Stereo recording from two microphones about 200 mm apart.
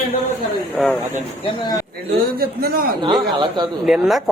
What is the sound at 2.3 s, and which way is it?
Speech, 50° right (ahead or behind).